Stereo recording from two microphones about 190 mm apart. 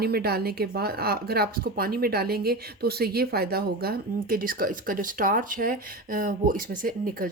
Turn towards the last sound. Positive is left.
turn(degrees=-50)  # may be behind; listen again after turning